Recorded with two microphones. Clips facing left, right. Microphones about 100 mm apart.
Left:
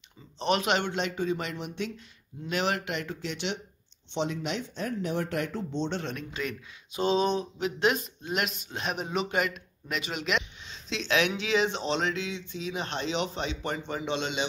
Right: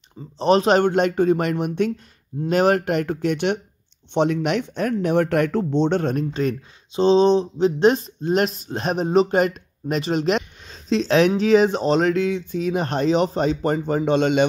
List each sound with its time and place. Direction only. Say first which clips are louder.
0.4 s speech: right 10 dB; 35° right (ahead or behind)
7.0 s speech: right 10 dB; 25° right (ahead or behind); by 14.4 s 50° right (ahead or behind)